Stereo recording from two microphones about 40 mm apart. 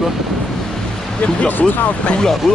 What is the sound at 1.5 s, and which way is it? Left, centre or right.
Speech, left.